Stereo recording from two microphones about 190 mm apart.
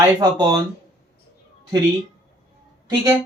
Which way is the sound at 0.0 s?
20° right (ahead or behind).